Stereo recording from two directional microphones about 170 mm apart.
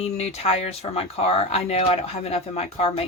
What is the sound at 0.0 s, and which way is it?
Speech, 40° left (ahead or behind).